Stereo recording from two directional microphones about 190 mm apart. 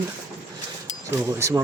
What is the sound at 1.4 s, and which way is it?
Speech, 15° right (ahead or behind).